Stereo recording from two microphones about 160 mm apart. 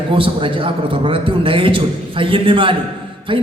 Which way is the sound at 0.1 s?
30° right (ahead or behind).